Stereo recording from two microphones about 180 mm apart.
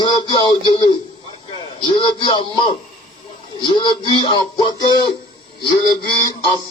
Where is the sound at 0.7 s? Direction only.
25° left (ahead or behind).